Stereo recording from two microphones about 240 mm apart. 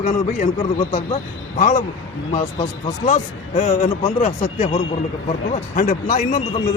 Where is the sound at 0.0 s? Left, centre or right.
Left.